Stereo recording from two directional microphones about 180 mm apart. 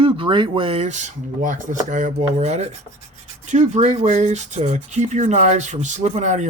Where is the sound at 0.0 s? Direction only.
30° right (ahead or behind).